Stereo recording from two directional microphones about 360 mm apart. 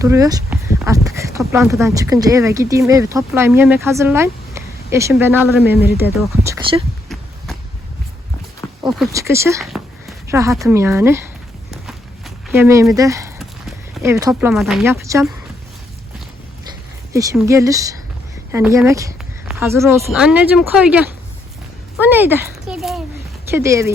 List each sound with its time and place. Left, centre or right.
0.0 s speech: centre
5.7 s speech: left
6.0 s speech: centre
8.9 s speech: centre
11.7 s walk: centre
17.1 s speech: centre
22.0 s a sound: centre
23.5 s speech: centre